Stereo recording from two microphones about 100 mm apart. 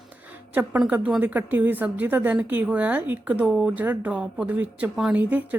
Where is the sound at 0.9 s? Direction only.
10° right (ahead or behind).